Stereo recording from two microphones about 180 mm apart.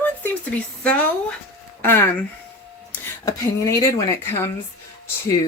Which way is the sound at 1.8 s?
10° left (ahead or behind).